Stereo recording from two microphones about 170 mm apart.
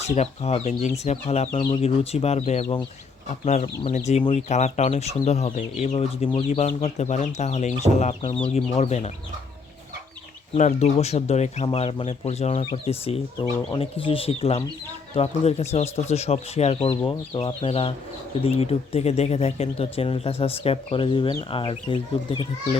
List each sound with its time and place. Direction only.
0.1 s speech: 40° left (ahead or behind)
10.5 s speech: 40° left (ahead or behind)